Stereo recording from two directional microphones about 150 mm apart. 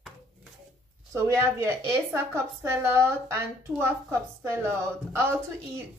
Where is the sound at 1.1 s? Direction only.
20° right (ahead or behind).